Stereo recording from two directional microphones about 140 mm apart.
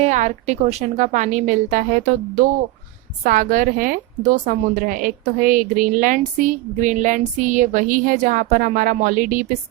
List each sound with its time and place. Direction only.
0.0 s a woman's voice: 55° right (ahead or behind); by 9.5 s 75° right (ahead or behind)